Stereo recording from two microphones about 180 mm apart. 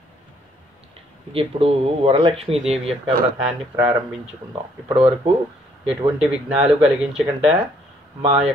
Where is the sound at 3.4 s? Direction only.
10° right (ahead or behind).